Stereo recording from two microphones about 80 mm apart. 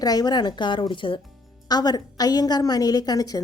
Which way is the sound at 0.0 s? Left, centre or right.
Left.